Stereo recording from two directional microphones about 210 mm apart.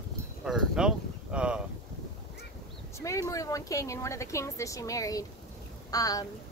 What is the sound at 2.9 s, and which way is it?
Speech, 15° left (ahead or behind).